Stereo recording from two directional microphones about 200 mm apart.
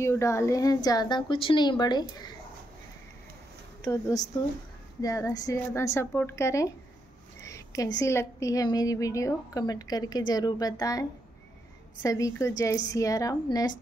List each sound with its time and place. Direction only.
0.0 s a woman's voice: 15° left (ahead or behind)
3.8 s a woman's voice: 20° left (ahead or behind)
7.4 s a sound: 15° left (ahead or behind)
8.0 s a woman's voice: 15° left (ahead or behind)